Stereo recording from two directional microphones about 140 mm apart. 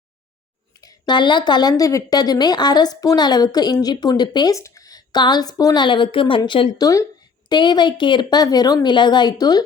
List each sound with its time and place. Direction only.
0.8 s a woman's voice: 30° left (ahead or behind)